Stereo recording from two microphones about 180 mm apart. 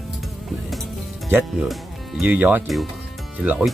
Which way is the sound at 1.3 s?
10° right (ahead or behind).